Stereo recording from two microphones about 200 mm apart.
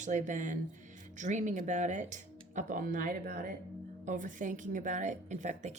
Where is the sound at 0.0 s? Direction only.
40° right (ahead or behind).